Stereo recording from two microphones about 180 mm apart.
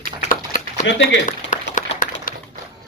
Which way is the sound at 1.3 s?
45° left (ahead or behind).